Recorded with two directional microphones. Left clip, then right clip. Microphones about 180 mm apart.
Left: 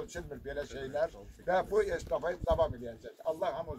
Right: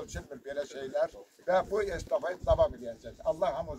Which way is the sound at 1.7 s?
15° right (ahead or behind).